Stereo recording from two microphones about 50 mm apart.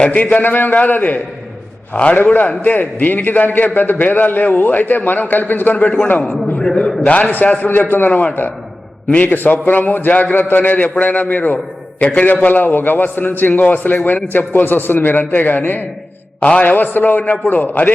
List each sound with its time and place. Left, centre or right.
0.0 s a man's voice: left
1.9 s a man's voice: left
2.1 s a man's voice: left
6.6 s a man's voice: centre
7.1 s a man's voice: left
12.5 s a man's voice: left
16.4 s a man's voice: left
16.7 s a man's voice: left